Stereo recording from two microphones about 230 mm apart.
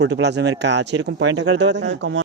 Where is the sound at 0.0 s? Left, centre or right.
Right.